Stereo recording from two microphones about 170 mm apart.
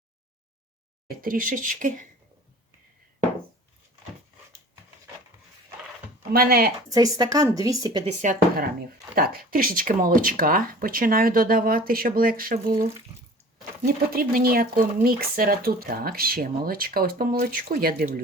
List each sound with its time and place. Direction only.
1.0 s speech: 60° right (ahead or behind)
6.3 s speech: 65° right (ahead or behind)
6.9 s a woman's voice: 20° right (ahead or behind)
8.0 s speech: 50° right (ahead or behind)
9.1 s speech: 60° right (ahead or behind)
13.8 s speech: 60° right (ahead or behind)